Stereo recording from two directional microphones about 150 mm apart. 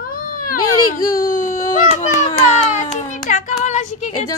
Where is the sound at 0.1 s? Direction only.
70° left (ahead or behind).